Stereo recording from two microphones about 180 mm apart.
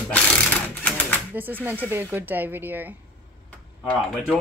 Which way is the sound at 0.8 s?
10° left (ahead or behind).